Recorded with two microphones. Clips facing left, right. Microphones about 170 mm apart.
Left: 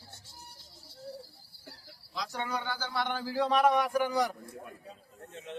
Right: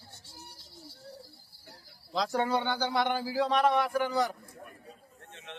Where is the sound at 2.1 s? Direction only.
55° right (ahead or behind).